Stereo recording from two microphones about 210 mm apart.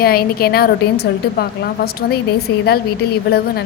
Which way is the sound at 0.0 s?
45° left (ahead or behind).